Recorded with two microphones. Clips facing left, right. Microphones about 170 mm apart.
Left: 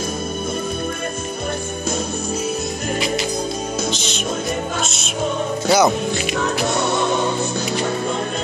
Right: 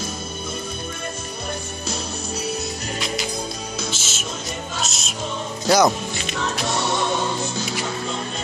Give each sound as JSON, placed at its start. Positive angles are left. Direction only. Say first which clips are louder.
{"t": 3.9, "sound": "music", "louder": "left 7 dB", "side_deg": -5}
{"t": 5.7, "sound": "speech", "louder": "left 1 dB", "side_deg": 5}
{"t": 6.4, "sound": "music", "louder": "left 2 dB", "side_deg": 55}